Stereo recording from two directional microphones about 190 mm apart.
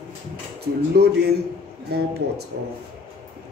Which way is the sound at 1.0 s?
55° right (ahead or behind).